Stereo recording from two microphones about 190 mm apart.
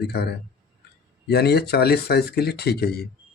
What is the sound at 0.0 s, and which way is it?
Speech, 60° left (ahead or behind).